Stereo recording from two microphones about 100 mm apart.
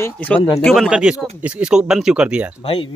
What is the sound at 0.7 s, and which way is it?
Speech, 5° right (ahead or behind).